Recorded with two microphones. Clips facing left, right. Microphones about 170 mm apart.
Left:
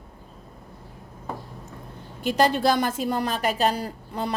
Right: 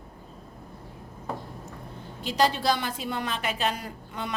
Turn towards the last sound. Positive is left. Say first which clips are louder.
# left 6 dB
turn(degrees=35)  # may be behind; listen again after turning